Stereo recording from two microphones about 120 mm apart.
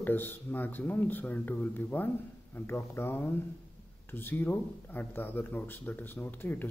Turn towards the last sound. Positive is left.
turn(degrees=15)  # may be behind; listen again after turning